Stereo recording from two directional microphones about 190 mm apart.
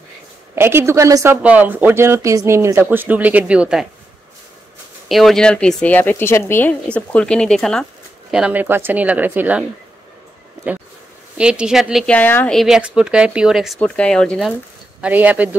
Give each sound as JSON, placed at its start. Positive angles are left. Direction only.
{"t": 0.6, "sound": "speech", "side_deg": -10}
{"t": 5.0, "sound": "speech", "side_deg": 0}
{"t": 11.3, "sound": "speech", "side_deg": -5}
{"t": 15.0, "sound": "speech", "side_deg": -10}